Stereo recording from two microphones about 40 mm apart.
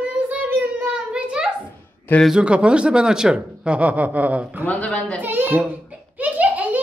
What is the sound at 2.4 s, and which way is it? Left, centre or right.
Speech, right.